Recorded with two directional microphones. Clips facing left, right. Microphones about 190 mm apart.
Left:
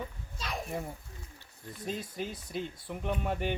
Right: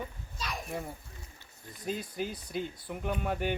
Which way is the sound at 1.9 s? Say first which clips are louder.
Right 2 dB; centre (ahead or behind).